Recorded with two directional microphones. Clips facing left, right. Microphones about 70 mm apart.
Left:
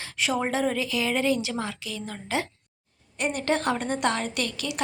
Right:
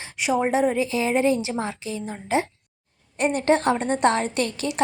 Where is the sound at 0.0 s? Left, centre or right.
Centre.